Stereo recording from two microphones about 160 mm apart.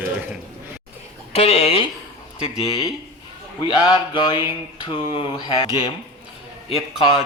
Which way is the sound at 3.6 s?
30° left (ahead or behind).